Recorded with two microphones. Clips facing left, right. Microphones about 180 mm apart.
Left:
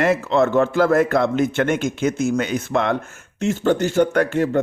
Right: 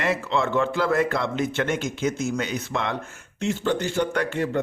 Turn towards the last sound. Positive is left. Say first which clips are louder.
# left 6 dB
turn(degrees=45)  # may be behind; listen again after turning